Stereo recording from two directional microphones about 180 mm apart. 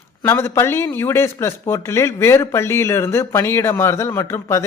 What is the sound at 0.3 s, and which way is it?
Speech, 15° left (ahead or behind).